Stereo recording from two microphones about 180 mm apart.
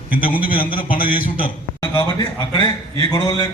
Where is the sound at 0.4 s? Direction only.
50° left (ahead or behind).